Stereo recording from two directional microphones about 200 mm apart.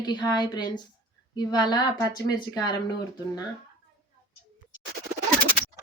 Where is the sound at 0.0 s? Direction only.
20° left (ahead or behind).